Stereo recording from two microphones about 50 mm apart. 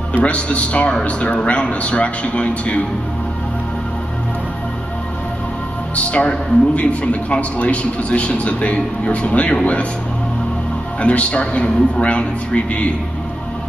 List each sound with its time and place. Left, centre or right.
0.1 s a man's voice: left
5.9 s a man's voice: left
11.0 s a man's voice: left